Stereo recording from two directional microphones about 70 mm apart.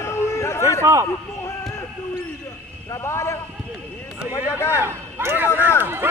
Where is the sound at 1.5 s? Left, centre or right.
Left.